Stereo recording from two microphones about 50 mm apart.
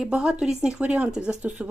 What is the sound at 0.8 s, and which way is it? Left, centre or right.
Speech, right.